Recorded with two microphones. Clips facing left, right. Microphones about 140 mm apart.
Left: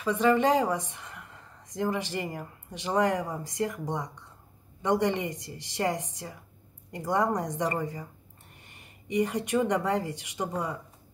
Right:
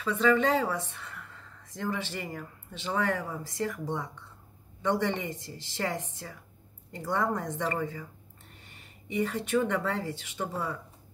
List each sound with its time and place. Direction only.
0.0 s speech: 15° left (ahead or behind)